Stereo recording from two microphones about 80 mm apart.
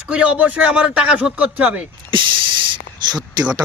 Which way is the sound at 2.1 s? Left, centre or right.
Right.